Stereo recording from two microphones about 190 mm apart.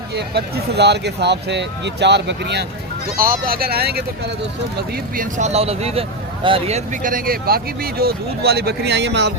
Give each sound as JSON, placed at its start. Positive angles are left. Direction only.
{"t": 0.1, "sound": "speech", "side_deg": -60}
{"t": 3.2, "sound": "speech", "side_deg": -50}
{"t": 5.1, "sound": "speech", "side_deg": -40}